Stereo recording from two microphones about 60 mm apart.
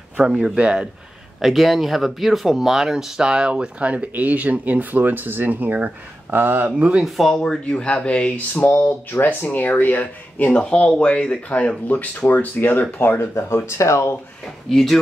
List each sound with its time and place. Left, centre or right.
0.2 s speech: centre
1.4 s speech: centre; by 6.9 s right
7.0 s speech: centre
7.7 s speech: centre
10.6 s speech: centre; by 13.6 s left
13.7 s speech: left
14.7 s speech: centre